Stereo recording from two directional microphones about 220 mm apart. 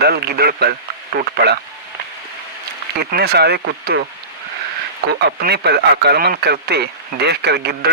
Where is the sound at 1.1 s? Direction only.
45° right (ahead or behind).